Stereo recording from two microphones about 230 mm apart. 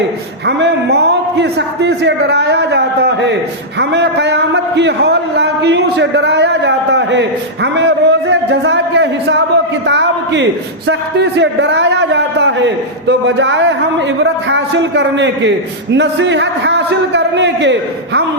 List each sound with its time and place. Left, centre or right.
0.4 s a man's voice: right